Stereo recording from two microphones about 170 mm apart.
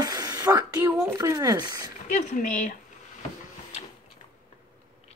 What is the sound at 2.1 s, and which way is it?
Speech, 50° left (ahead or behind).